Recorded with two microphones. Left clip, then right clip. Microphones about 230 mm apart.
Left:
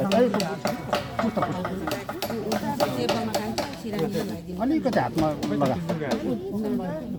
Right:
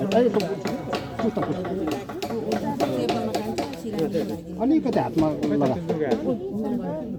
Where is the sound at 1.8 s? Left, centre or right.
Left.